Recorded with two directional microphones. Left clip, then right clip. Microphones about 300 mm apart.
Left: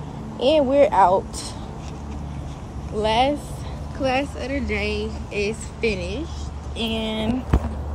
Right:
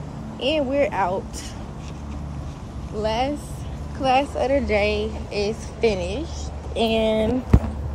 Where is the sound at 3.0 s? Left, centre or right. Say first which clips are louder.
Left 4 dB; centre.